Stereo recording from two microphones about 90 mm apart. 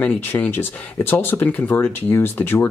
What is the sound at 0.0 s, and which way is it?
Speech, 20° left (ahead or behind).